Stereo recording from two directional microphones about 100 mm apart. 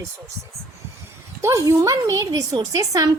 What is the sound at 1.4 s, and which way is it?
Speech, 30° right (ahead or behind).